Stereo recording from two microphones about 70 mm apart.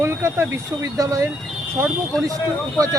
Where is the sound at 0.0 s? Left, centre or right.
Right.